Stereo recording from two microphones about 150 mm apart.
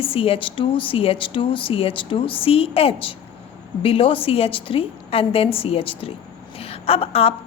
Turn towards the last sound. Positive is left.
turn(degrees=40)  # may be behind; listen again after turning